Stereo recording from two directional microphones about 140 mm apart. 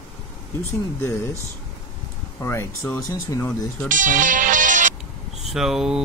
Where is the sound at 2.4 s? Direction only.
15° left (ahead or behind).